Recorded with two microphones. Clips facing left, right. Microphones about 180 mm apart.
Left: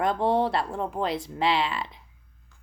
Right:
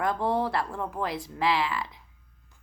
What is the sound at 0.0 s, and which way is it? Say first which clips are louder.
Speech: left 3 dB; 25° left (ahead or behind).